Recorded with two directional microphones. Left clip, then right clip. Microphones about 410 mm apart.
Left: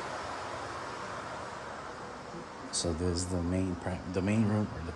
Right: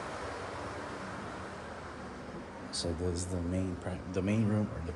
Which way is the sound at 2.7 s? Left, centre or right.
Centre.